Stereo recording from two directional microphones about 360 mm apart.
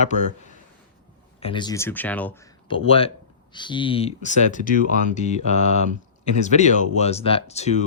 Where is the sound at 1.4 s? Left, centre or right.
Centre.